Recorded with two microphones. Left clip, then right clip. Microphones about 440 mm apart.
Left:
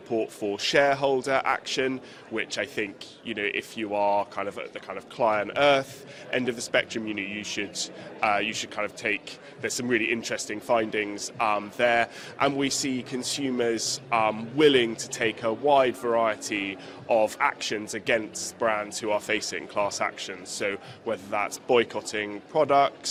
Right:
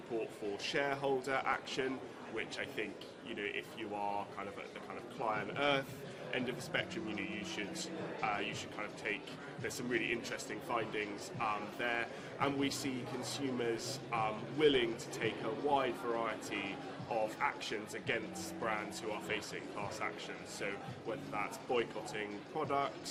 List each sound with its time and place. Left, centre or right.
0.5 s a man's voice: left
2.3 s a man's voice: left